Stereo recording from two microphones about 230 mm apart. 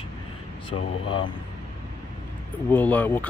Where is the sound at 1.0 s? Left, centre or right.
Left.